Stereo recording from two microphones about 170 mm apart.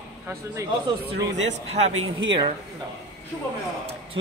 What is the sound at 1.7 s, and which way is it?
Speech, 40° right (ahead or behind).